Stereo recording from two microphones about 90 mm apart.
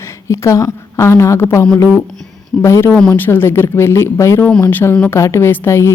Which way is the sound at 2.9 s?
10° left (ahead or behind).